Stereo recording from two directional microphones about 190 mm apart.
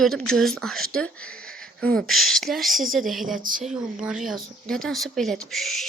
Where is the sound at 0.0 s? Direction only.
Centre (ahead or behind).